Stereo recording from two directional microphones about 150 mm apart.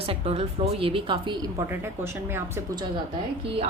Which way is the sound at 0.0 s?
40° right (ahead or behind).